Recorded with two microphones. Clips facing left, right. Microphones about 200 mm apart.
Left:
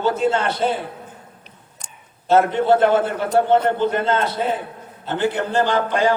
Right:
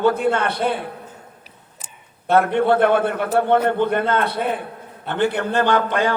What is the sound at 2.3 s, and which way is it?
A man's voice, 60° right (ahead or behind).